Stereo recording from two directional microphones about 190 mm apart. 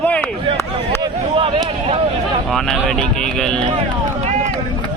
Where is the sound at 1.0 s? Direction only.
25° right (ahead or behind).